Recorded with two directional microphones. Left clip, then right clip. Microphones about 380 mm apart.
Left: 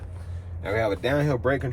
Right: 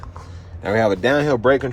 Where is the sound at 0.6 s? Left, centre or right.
Centre.